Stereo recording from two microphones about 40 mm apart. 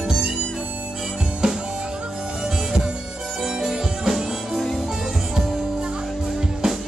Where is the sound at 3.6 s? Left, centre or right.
Centre.